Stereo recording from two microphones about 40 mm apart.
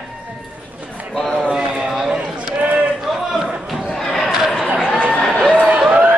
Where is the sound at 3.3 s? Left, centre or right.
Centre.